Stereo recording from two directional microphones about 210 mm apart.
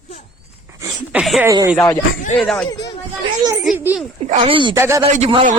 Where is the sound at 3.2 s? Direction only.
20° right (ahead or behind).